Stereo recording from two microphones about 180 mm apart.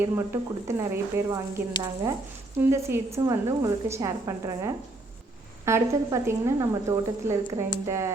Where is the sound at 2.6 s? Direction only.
15° right (ahead or behind).